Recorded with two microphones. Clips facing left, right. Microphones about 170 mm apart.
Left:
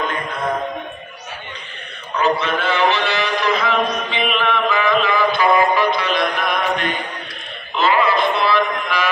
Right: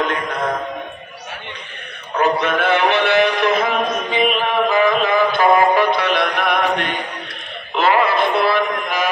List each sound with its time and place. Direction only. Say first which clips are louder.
0.0 s music: right 3 dB; 70° right (ahead or behind)
2.1 s a sound: right 2 dB; 55° right (ahead or behind)
7.7 s synthetic singing: right 1 dB; 60° right (ahead or behind)